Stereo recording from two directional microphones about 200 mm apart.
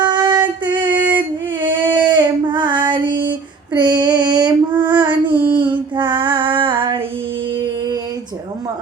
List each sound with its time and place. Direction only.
0.0 s female singing: 20° right (ahead or behind)
1.6 s child singing: 25° right (ahead or behind)
3.7 s female singing: 20° right (ahead or behind)
4.8 s child singing: 25° right (ahead or behind)